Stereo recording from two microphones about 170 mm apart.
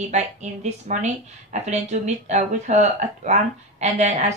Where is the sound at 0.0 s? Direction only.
40° right (ahead or behind).